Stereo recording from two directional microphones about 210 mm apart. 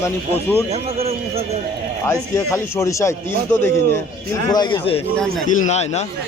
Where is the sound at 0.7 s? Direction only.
30° right (ahead or behind).